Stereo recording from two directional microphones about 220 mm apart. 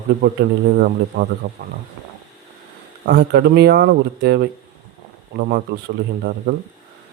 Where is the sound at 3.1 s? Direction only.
45° right (ahead or behind).